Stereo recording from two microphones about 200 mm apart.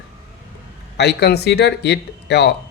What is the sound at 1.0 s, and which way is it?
Speech, 55° left (ahead or behind).